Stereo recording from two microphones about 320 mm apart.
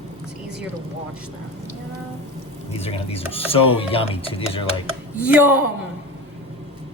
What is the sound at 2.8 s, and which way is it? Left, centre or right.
Speech, centre.